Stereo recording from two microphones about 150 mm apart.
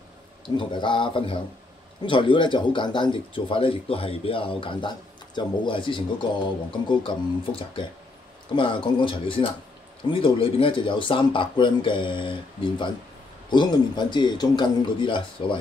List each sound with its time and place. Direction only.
0.6 s speech: 30° left (ahead or behind)